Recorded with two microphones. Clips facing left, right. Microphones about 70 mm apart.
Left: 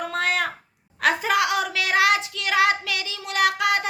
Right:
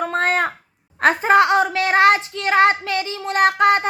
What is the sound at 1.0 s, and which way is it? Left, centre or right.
A child's voice, right.